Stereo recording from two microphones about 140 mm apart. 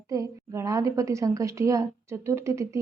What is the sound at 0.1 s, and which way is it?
A woman's voice, 25° right (ahead or behind).